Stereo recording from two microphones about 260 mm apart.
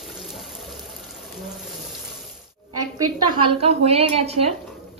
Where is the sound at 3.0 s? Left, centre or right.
Centre.